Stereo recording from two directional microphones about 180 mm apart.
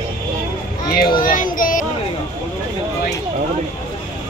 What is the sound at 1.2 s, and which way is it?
Speech, 50° left (ahead or behind).